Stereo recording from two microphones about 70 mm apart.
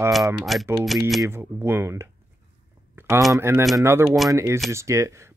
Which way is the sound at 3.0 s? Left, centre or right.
Right.